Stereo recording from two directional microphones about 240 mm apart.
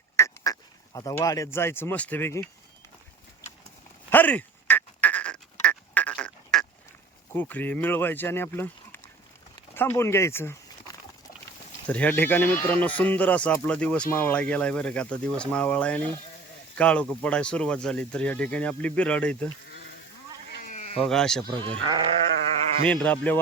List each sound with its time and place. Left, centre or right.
0.2 s duck: centre
0.9 s speech: centre
4.1 s duck: centre
7.3 s speech: centre
11.9 s speech: centre
20.7 s sheep: left
21.0 s speech: centre
21.5 s speech: centre
22.9 s speech: centre